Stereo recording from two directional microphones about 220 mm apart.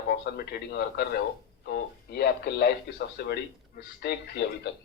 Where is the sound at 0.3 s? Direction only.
45° left (ahead or behind).